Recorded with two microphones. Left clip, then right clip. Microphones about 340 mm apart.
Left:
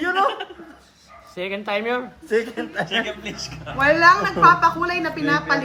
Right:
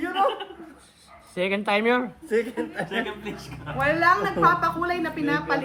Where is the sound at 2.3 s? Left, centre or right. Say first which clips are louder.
Left 5 dB; centre.